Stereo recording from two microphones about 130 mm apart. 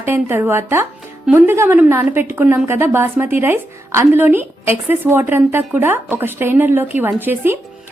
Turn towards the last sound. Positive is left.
turn(degrees=-15)  # may be behind; listen again after turning